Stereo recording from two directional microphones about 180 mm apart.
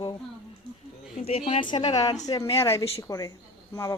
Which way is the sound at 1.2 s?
35° left (ahead or behind).